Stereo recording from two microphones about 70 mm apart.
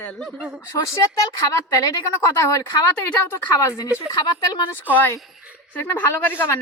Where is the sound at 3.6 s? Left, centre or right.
Left.